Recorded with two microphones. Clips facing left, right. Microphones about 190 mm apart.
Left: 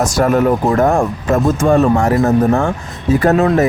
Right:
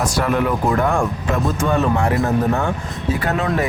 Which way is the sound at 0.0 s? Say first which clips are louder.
Left 6 dB; 45° left (ahead or behind).